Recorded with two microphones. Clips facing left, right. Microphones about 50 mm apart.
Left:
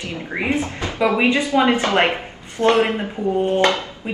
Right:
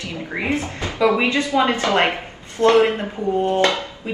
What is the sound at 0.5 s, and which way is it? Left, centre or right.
Speech, left.